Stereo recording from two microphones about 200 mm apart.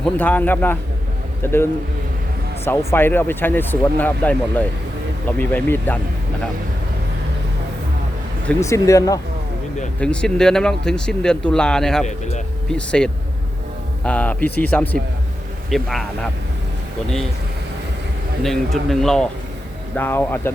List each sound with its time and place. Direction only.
0.0 s a man's voice: 10° left (ahead or behind)
2.6 s speech: 10° left (ahead or behind)
8.4 s speech: 15° left (ahead or behind)
10.0 s speech: 5° left (ahead or behind)
12.0 s speech: 35° left (ahead or behind)
12.7 s speech: 5° left (ahead or behind)
18.4 s speech: centre (ahead or behind)